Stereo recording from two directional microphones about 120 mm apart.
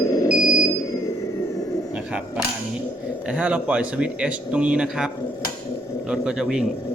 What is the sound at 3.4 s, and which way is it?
Speech, 10° right (ahead or behind).